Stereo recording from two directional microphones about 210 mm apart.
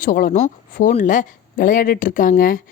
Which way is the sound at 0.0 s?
40° left (ahead or behind).